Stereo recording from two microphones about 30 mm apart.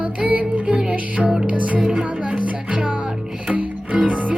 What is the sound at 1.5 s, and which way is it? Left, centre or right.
Music, right.